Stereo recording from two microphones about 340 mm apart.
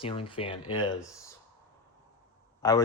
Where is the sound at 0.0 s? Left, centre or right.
Centre.